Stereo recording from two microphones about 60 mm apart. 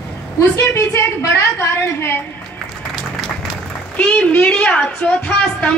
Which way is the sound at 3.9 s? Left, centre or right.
Centre.